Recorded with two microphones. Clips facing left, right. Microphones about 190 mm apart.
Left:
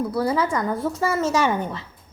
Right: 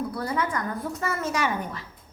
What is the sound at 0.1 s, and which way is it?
Speech, 85° left.